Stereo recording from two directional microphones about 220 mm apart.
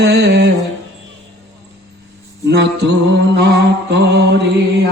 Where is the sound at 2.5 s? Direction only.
50° right (ahead or behind).